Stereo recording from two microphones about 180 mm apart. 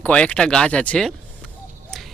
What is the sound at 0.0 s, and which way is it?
Speech, 5° left (ahead or behind).